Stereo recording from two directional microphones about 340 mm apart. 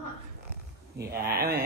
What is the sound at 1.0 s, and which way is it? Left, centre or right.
Speech, right.